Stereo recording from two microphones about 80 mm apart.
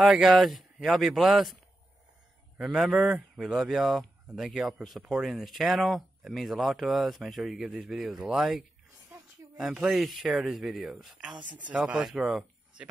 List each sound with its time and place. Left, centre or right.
0.0 s speech: centre
2.6 s speech: centre
9.1 s a sound: right
9.6 s speech: centre
11.4 s speech: centre